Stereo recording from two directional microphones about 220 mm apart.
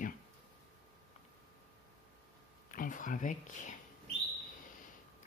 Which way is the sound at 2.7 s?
35° left (ahead or behind).